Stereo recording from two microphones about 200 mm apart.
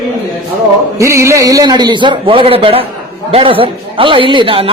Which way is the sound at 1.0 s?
15° right (ahead or behind).